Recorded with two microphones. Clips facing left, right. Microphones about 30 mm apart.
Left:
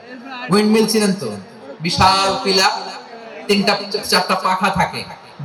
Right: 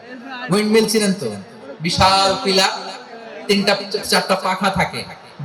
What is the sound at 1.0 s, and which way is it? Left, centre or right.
Speech, left.